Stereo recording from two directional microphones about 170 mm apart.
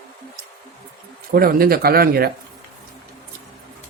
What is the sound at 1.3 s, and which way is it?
Speech, 60° right (ahead or behind).